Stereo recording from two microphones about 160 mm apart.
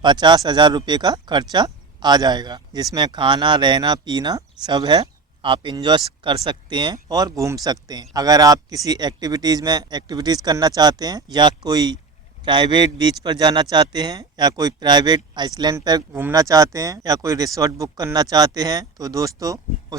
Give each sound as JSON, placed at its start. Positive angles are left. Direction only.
{"t": 0.0, "sound": "speech", "side_deg": -30}